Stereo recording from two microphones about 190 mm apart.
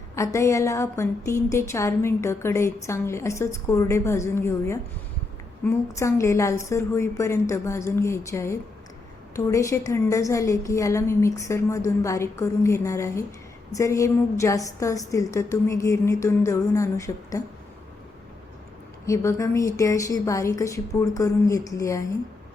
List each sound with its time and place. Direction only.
0.2 s a woman's voice: 15° left (ahead or behind)
19.0 s a woman's voice: 15° left (ahead or behind)